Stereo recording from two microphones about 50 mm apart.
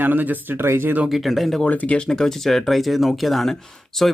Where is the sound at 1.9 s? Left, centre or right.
Centre.